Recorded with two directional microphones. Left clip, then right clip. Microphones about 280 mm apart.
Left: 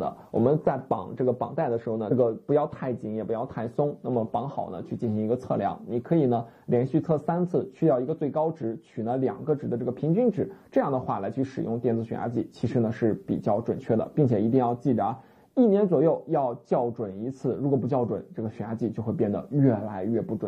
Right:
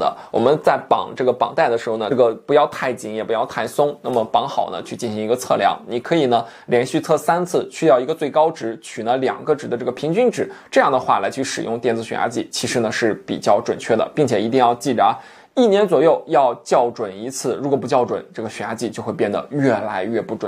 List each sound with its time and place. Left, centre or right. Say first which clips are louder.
0.4 s speech: right 8 dB; centre
3.7 s speech: right 8 dB; right
4.4 s speech: right 12 dB; centre